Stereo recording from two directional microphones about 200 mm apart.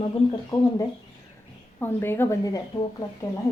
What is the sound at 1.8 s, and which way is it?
Speech, 10° left (ahead or behind).